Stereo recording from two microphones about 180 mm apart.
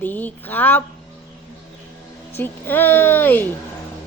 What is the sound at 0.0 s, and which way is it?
Speech, 10° left (ahead or behind).